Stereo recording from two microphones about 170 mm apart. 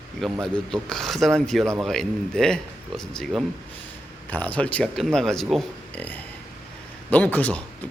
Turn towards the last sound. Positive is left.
turn(degrees=10)  # may be behind; listen again after turning